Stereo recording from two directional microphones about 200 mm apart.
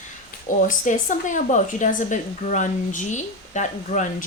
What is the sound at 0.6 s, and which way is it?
Speech, 40° left (ahead or behind).